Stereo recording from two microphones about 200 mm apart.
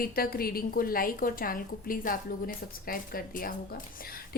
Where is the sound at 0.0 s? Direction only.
50° left (ahead or behind).